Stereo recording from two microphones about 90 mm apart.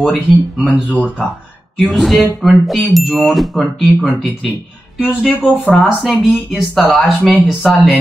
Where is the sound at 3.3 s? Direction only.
Centre (ahead or behind).